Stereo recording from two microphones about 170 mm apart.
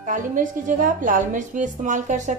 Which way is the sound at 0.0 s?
50° right (ahead or behind).